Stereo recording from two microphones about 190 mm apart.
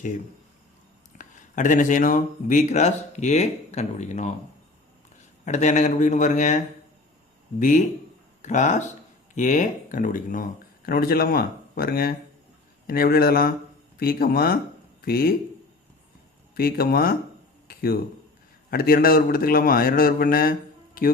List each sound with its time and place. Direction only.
1.2 s speech: 40° left (ahead or behind)
5.5 s speech: 40° left (ahead or behind)
7.6 s speech: 40° left (ahead or behind)
16.6 s speech: 50° left (ahead or behind)
17.7 s a sound: 50° left (ahead or behind)
18.7 s speech: 50° left (ahead or behind)